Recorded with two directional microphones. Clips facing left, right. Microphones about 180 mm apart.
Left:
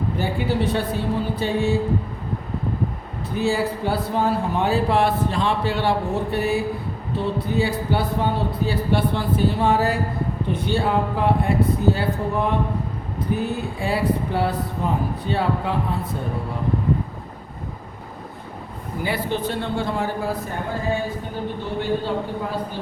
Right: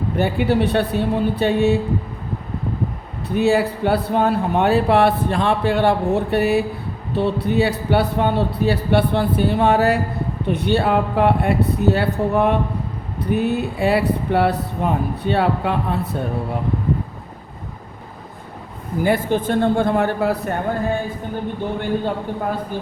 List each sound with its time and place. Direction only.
0.2 s a man's voice: 65° right (ahead or behind)
3.3 s a man's voice: 65° right (ahead or behind)
6.3 s a man's voice: 65° right (ahead or behind)
19.0 s a man's voice: 50° right (ahead or behind)